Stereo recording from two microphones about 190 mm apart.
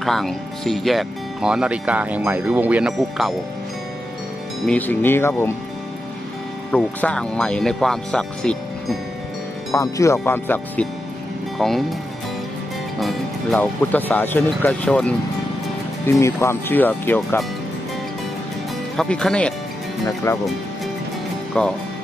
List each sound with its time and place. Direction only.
0.0 s speech: centre (ahead or behind)
4.6 s speech: 10° left (ahead or behind)
6.7 s speech: 5° left (ahead or behind)
9.7 s speech: 15° left (ahead or behind); by 12.0 s centre (ahead or behind)
13.0 s speech: 5° left (ahead or behind)
18.9 s speech: 5° left (ahead or behind)
20.3 s speech: 15° left (ahead or behind)
21.5 s speech: 5° left (ahead or behind)